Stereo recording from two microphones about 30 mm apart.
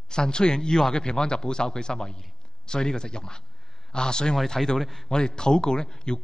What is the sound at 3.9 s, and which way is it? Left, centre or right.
Speech, left.